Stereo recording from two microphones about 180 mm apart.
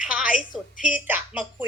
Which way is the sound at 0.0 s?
5° right (ahead or behind).